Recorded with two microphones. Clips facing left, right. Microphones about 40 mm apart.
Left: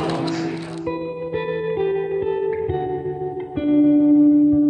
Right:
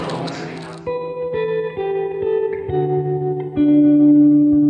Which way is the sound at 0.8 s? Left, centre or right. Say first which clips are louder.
Right 5 dB; centre.